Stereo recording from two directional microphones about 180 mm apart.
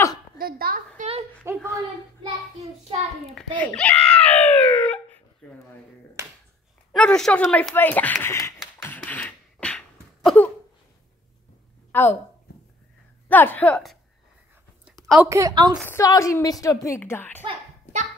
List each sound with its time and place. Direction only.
0.4 s a woman's voice: 55° right (ahead or behind)
1.6 s speech: centre (ahead or behind)
3.3 s a child's voice: 5° left (ahead or behind)
6.9 s a child's voice: centre (ahead or behind)
8.8 s a sound: 10° left (ahead or behind)
11.9 s speech: 10° left (ahead or behind)
13.3 s a child's voice: 10° left (ahead or behind)
14.9 s a sound: centre (ahead or behind)
15.1 s a woman's voice: 15° right (ahead or behind)
15.8 s a child's voice: 15° left (ahead or behind)